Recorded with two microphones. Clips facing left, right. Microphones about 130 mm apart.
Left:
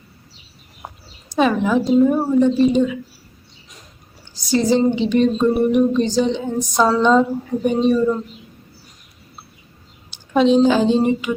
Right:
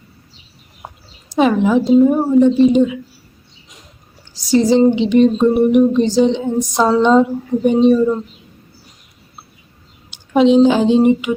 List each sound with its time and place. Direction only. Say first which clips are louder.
1.4 s a woman's voice: right 3 dB; 20° right (ahead or behind)
4.5 s speech: right 5 dB; 20° right (ahead or behind)
10.1 s a woman's voice: right 3 dB; 20° right (ahead or behind)